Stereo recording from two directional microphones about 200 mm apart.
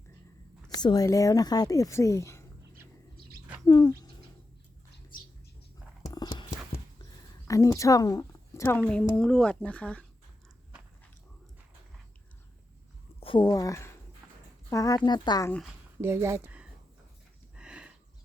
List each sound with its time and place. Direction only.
0.8 s speech: 20° left (ahead or behind)
3.7 s speech: 20° left (ahead or behind)
6.1 s clip-clop: 20° left (ahead or behind)
7.4 s a woman's voice: 15° left (ahead or behind)
13.1 s a woman's voice: 25° left (ahead or behind)
16.0 s speech: 10° right (ahead or behind)
17.6 s a sound: 5° right (ahead or behind)